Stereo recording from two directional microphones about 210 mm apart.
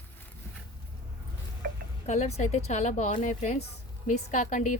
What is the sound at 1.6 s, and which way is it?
Music, 45° right (ahead or behind).